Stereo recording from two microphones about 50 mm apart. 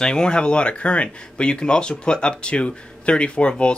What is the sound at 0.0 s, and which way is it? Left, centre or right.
Speech, centre.